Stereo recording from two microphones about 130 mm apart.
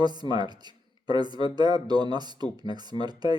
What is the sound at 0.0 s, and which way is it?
Speech, 35° right (ahead or behind).